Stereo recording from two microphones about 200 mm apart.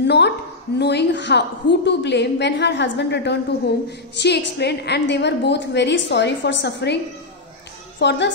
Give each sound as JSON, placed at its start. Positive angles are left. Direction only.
{"t": 0.0, "sound": "a sound", "side_deg": 55}
{"t": 0.7, "sound": "a woman's voice", "side_deg": 55}
{"t": 8.0, "sound": "a woman's voice", "side_deg": 60}